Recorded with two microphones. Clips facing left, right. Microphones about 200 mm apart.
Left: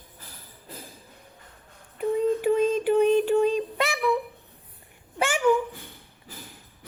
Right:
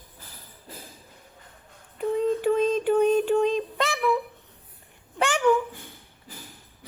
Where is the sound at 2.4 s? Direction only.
10° left (ahead or behind).